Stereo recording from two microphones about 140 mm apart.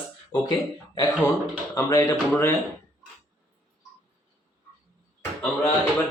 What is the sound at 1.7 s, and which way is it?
Speech, 20° left (ahead or behind).